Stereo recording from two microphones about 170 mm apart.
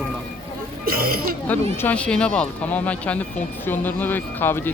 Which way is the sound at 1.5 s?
10° left (ahead or behind).